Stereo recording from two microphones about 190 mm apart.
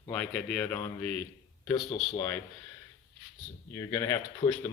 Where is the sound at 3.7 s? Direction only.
15° left (ahead or behind).